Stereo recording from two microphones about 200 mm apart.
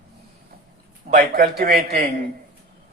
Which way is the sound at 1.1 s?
40° right (ahead or behind).